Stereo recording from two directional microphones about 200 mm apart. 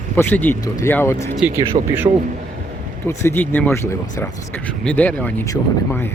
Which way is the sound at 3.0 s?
15° left (ahead or behind).